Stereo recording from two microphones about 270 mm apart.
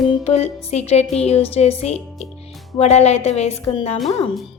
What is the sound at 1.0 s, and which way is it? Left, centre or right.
Speech, centre.